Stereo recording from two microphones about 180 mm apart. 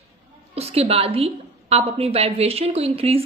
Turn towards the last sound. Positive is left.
turn(degrees=-35)  # may be behind; listen again after turning